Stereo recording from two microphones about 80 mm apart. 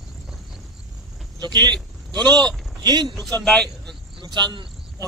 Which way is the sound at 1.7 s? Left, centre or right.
Centre.